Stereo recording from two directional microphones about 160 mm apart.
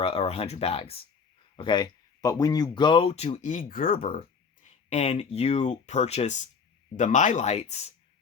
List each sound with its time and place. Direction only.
0.0 s speech: 35° left (ahead or behind); by 4.0 s 60° left (ahead or behind)
4.2 s speech: 45° left (ahead or behind)